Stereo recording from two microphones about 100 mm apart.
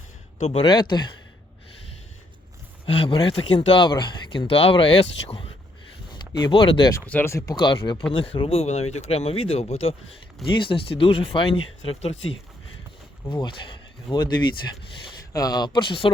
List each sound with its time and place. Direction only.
0.6 s speech: 50° left (ahead or behind)
2.8 s speech: 65° left (ahead or behind)
6.1 s speech: 50° left (ahead or behind)
7.3 s speech: 30° left (ahead or behind)
7.5 s speech: 55° left (ahead or behind)
8.2 s speech: 65° left (ahead or behind); by 9.9 s 90° left
10.4 s speech: 55° left (ahead or behind)
13.2 s speech: 55° left (ahead or behind)